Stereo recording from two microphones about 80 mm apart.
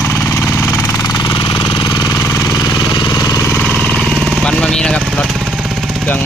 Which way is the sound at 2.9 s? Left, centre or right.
Left.